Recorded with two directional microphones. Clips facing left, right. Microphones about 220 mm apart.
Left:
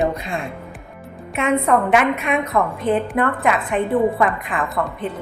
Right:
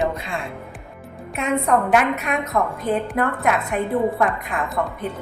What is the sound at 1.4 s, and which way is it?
A woman's voice, centre (ahead or behind).